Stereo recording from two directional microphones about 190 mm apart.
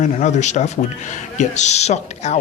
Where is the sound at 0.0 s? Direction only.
40° left (ahead or behind).